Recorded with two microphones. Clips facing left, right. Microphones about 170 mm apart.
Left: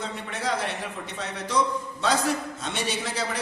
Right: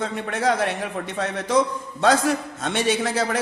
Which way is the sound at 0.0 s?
55° right (ahead or behind).